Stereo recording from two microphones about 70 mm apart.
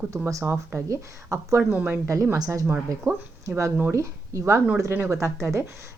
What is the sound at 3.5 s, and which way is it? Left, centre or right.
Speech, right.